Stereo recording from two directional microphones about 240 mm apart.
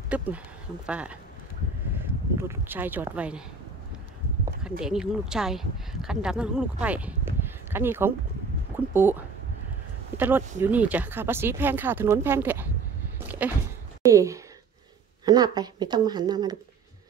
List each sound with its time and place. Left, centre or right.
0.1 s speech: centre
2.4 s speech: centre
4.6 s speech: centre
13.4 s a sound: centre
14.0 s speech: centre